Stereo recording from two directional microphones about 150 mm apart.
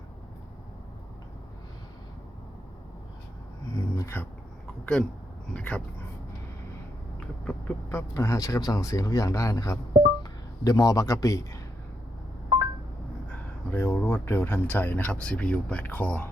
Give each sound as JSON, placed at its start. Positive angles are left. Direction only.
{"t": 3.8, "sound": "a sound", "side_deg": 20}
{"t": 5.5, "sound": "speech", "side_deg": 5}
{"t": 7.4, "sound": "speech", "side_deg": 15}
{"t": 13.2, "sound": "speech", "side_deg": 10}